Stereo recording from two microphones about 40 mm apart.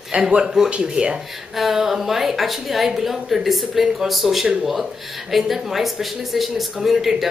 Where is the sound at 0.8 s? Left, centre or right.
Centre.